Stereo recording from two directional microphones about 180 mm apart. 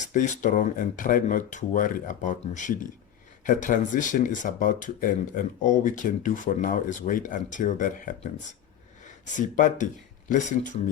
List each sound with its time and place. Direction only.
0.1 s speech: 45° left (ahead or behind)
9.3 s speech: 45° left (ahead or behind)